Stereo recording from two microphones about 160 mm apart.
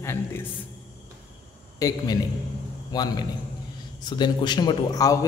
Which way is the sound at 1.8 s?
20° left (ahead or behind).